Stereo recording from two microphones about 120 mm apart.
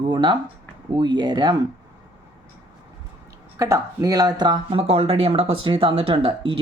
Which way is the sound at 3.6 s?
30° right (ahead or behind).